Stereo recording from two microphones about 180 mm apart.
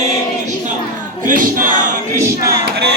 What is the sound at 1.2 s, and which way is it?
Speech, 50° right (ahead or behind).